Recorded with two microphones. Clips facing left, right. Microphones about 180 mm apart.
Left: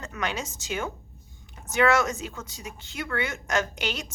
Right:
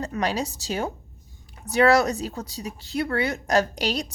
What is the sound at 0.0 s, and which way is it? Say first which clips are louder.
A woman's voice: right 6 dB; 35° right (ahead or behind).